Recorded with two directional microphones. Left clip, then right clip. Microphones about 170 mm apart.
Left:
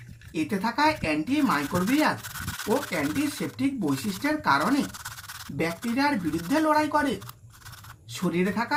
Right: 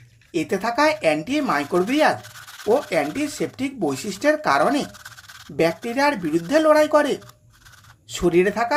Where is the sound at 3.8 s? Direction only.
35° right (ahead or behind).